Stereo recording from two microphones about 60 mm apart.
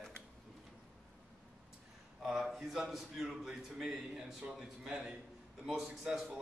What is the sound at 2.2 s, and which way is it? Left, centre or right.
Speech, centre.